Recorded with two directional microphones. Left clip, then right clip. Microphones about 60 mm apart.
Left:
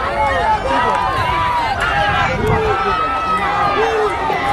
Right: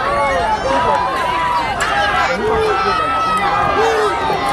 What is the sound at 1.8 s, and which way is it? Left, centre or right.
Run, right.